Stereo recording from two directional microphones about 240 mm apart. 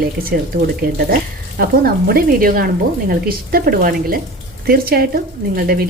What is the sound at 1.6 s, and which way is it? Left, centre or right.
Speech, right.